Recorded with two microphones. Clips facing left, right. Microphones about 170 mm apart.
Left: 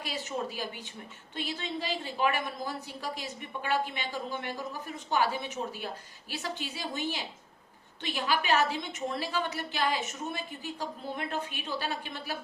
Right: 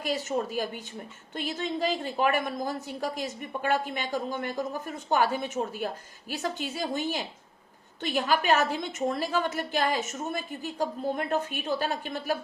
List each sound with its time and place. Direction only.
0.0 s a woman's voice: 45° right (ahead or behind)